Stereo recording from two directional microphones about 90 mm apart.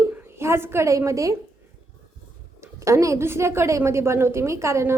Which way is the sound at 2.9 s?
35° right (ahead or behind).